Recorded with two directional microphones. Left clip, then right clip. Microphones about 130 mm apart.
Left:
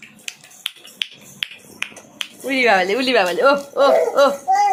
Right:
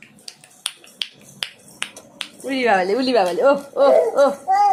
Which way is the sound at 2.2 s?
10° right (ahead or behind).